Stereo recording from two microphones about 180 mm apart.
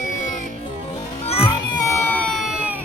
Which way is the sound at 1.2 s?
35° left (ahead or behind).